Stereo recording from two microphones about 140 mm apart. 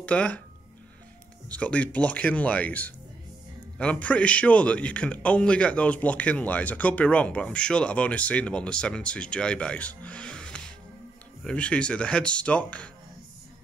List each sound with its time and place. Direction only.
0.0 s speech: 10° left (ahead or behind)
1.5 s a man's voice: 10° left (ahead or behind)